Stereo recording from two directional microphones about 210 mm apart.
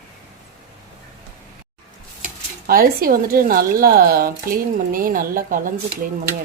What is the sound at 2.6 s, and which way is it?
Speech, 45° right (ahead or behind).